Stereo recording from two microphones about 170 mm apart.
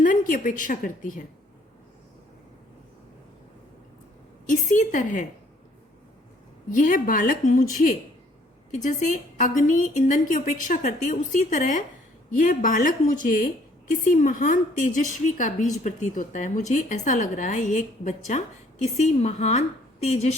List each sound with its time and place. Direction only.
0.0 s speech: 50° left (ahead or behind)
4.4 s speech: 50° left (ahead or behind)
6.7 s speech: 55° left (ahead or behind)